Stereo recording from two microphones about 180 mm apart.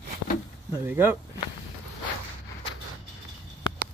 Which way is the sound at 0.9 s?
15° right (ahead or behind).